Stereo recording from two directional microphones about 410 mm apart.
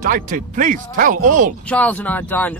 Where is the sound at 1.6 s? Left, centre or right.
Centre.